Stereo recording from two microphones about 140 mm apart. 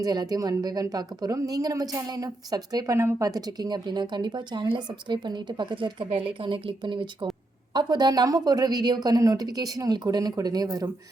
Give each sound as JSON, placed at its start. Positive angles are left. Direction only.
{"t": 0.0, "sound": "speech", "side_deg": -30}